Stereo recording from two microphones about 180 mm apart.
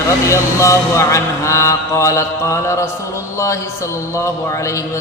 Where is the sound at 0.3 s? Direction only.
15° left (ahead or behind).